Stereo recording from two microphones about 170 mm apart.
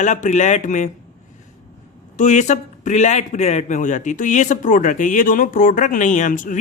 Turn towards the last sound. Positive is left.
turn(degrees=50)  # may be behind; listen again after turning